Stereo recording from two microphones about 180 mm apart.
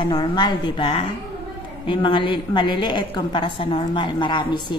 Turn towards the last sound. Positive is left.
turn(degrees=25)  # may be behind; listen again after turning